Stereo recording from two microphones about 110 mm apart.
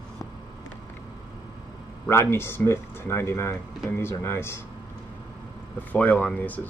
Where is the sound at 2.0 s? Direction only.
20° left (ahead or behind).